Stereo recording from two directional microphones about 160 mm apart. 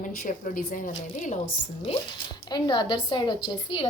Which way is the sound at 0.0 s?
55° left (ahead or behind).